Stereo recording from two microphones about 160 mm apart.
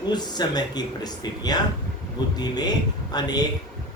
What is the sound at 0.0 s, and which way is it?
Speech, 25° left (ahead or behind).